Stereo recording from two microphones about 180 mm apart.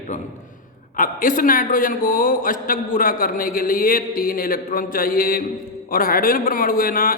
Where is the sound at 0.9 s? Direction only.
50° left (ahead or behind).